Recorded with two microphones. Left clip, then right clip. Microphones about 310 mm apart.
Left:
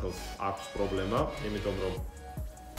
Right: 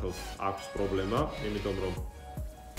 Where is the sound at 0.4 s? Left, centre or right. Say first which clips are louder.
Even; centre.